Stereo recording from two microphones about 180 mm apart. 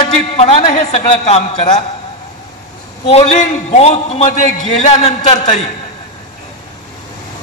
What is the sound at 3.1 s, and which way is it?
A man's voice, 35° left (ahead or behind).